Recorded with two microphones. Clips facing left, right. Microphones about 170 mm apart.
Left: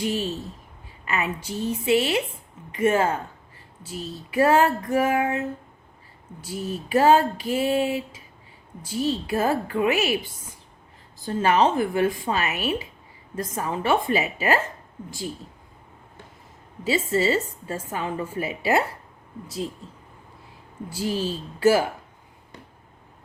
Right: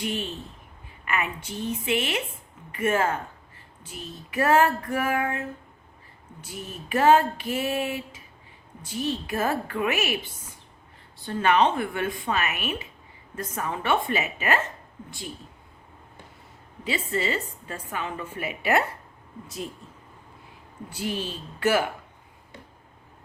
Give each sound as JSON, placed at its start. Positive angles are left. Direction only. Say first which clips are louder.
{"t": 0.0, "sound": "a woman's voice", "louder": "left 4 dB", "side_deg": 30}
{"t": 6.5, "sound": "a woman's voice", "louder": "left 6 dB", "side_deg": 30}
{"t": 11.3, "sound": "a woman's voice", "louder": "left 2 dB", "side_deg": 30}
{"t": 16.8, "sound": "a woman's voice", "louder": "left 6 dB", "side_deg": 35}
{"t": 20.9, "sound": "a woman's voice", "louder": "left 4 dB", "side_deg": 35}